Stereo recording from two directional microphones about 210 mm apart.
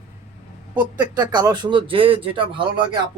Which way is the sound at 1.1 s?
20° right (ahead or behind).